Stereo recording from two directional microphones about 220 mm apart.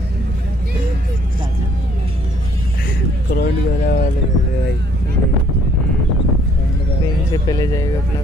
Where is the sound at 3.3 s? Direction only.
45° left (ahead or behind).